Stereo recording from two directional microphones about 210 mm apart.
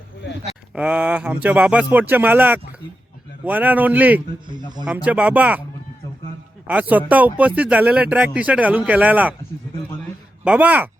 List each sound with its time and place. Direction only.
0.7 s speech: 5° right (ahead or behind)
6.7 s speech: 5° right (ahead or behind)
10.4 s speech: 5° right (ahead or behind)